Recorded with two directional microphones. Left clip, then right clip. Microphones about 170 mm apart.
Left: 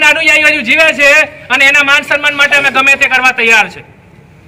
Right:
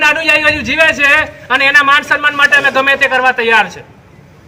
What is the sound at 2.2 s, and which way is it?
A man's voice, 20° left (ahead or behind).